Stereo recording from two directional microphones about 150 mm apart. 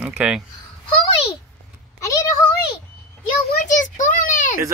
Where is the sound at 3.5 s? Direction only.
75° left (ahead or behind).